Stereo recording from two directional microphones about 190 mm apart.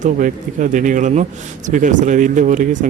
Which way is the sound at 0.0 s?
40° right (ahead or behind).